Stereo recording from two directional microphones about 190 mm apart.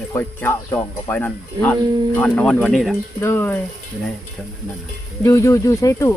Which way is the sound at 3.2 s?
15° left (ahead or behind).